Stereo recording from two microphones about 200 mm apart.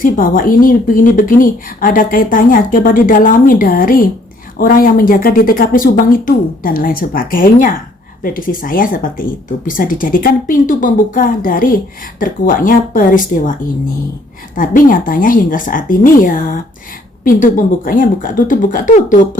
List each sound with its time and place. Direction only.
0.0 s speech: 45° left (ahead or behind)
14.5 s speech: 40° left (ahead or behind)